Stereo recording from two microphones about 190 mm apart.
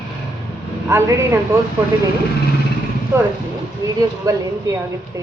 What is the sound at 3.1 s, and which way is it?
Speech, 15° right (ahead or behind).